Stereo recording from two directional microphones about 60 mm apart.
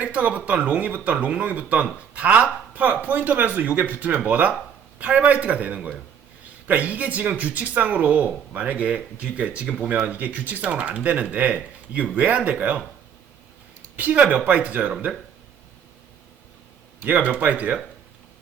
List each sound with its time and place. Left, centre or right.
0.0 s speech: right
13.9 s speech: right
17.0 s speech: right